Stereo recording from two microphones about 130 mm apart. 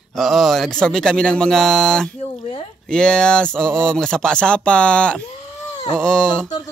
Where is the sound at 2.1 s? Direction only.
45° left (ahead or behind).